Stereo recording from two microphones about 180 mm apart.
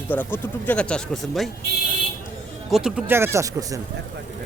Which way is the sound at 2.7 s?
5° right (ahead or behind).